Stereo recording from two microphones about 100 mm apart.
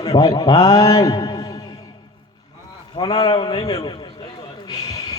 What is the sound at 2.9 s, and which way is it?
A man's voice, 40° left (ahead or behind).